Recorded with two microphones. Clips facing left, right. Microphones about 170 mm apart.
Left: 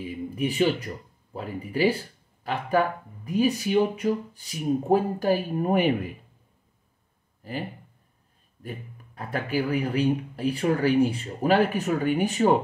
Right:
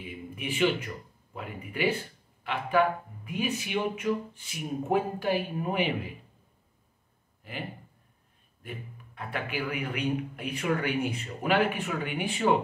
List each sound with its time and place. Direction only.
0.0 s a sound: 40° left (ahead or behind)
1.3 s a man's voice: 35° left (ahead or behind)
7.4 s a man's voice: 40° left (ahead or behind)
8.6 s a man's voice: 40° left (ahead or behind)